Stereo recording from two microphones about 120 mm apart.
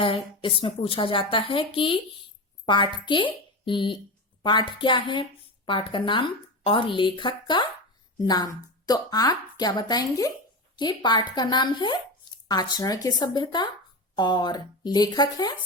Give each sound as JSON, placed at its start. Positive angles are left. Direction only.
{"t": 0.0, "sound": "a woman's voice", "side_deg": 45}